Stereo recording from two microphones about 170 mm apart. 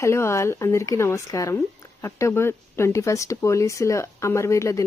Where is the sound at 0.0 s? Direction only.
15° left (ahead or behind).